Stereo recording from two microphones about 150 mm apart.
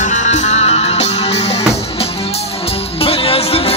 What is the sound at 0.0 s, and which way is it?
Music, 55° left (ahead or behind).